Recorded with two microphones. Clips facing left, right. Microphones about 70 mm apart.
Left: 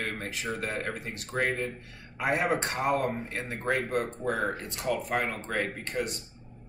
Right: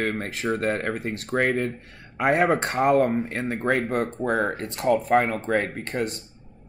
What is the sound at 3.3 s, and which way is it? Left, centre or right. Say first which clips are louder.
Speech: right 6 dB; right.